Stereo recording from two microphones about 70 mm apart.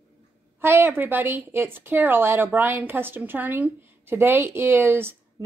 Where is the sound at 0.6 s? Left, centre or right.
Right.